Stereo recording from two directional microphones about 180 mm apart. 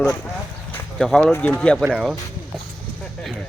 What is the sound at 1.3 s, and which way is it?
Speech, 5° left (ahead or behind).